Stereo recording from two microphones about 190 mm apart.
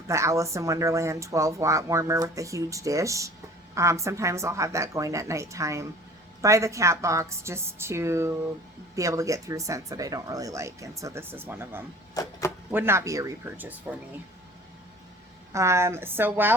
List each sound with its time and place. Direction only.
0.1 s speech: 15° right (ahead or behind)
12.2 s speech: 20° left (ahead or behind)
12.7 s speech: 15° right (ahead or behind)
15.5 s speech: 15° right (ahead or behind)